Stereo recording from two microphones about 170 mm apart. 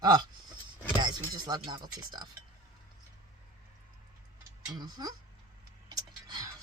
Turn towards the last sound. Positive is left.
turn(degrees=-25)  # may be behind; listen again after turning